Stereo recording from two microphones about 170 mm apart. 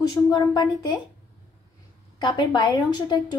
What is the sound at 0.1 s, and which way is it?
Speech, 20° left (ahead or behind).